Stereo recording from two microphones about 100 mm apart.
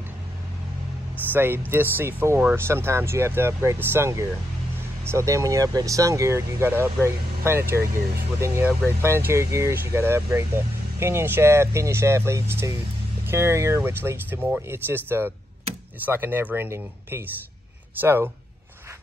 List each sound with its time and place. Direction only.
1.3 s speech: 20° right (ahead or behind)